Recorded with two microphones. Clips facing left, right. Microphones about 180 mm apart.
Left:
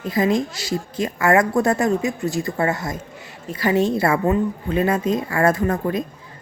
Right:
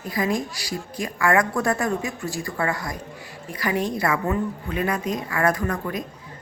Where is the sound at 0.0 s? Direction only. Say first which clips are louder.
Left 5 dB; 25° left (ahead or behind).